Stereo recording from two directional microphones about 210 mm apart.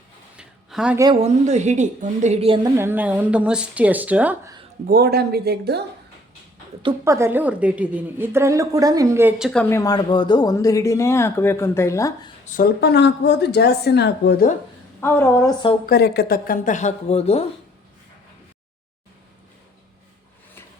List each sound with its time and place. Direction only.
0.3 s a sound: 5° right (ahead or behind)
1.2 s a woman's voice: 35° right (ahead or behind)
2.7 s a woman's voice: 10° right (ahead or behind)
4.9 s speech: 45° right (ahead or behind)
6.8 s a woman's voice: 15° right (ahead or behind)
9.5 s speech: 10° left (ahead or behind)
12.5 s speech: 45° left (ahead or behind)
15.0 s speech: 10° left (ahead or behind)
15.9 s speech: 50° left (ahead or behind); by 17.4 s 30° left (ahead or behind)